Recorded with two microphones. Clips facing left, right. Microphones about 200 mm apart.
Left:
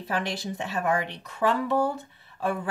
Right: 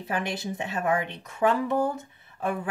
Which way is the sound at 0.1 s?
20° right (ahead or behind).